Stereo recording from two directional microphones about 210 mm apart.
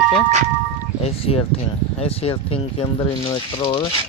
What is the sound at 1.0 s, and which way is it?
Speech, 30° left (ahead or behind).